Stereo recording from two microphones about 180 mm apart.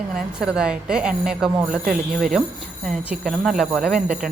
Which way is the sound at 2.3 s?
Centre (ahead or behind).